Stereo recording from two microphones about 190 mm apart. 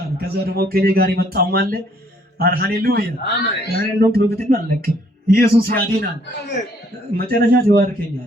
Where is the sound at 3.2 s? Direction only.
65° left (ahead or behind).